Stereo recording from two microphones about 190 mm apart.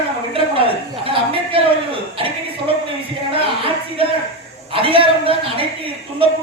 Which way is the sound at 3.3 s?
30° right (ahead or behind).